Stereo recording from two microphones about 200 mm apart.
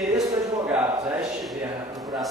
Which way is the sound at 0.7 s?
15° right (ahead or behind).